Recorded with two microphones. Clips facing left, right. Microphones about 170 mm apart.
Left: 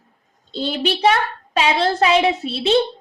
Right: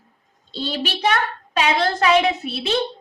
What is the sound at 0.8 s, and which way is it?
A woman's voice, 30° left (ahead or behind).